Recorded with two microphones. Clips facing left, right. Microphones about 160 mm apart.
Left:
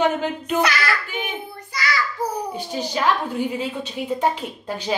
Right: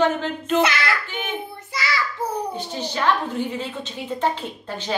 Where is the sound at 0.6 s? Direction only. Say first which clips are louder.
Right 1 dB; 25° right (ahead or behind).